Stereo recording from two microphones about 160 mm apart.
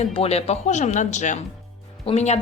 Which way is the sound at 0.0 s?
40° left (ahead or behind).